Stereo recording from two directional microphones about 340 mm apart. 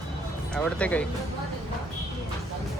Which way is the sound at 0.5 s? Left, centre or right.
Centre.